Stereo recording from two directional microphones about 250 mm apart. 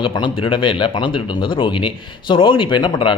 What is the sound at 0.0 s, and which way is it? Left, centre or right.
Speech, left.